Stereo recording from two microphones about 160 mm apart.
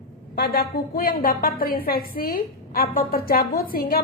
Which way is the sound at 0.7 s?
65° left (ahead or behind).